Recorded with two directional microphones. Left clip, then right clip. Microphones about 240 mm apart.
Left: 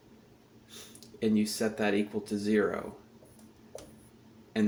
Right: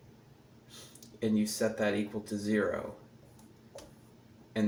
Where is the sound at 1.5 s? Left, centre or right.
Left.